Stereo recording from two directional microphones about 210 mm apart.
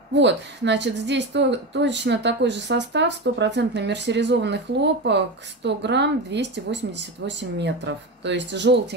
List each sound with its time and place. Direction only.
0.1 s a woman's voice: 55° right (ahead or behind)